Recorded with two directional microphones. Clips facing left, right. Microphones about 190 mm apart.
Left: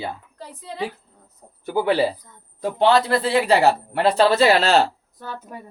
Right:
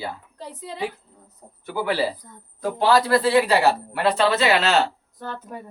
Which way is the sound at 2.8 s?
25° left (ahead or behind).